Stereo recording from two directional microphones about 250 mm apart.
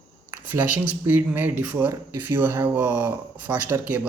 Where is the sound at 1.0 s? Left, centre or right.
Centre.